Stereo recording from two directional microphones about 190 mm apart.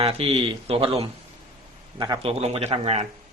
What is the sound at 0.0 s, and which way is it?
A man's voice, 30° right (ahead or behind).